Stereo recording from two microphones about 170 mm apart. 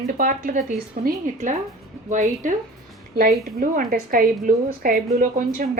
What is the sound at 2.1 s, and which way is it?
A woman's voice, 45° right (ahead or behind).